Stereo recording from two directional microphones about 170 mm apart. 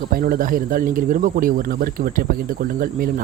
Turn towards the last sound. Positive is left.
turn(degrees=-55)  # may be behind; listen again after turning